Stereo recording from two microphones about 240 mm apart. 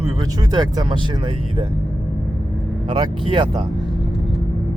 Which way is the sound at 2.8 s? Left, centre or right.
Centre.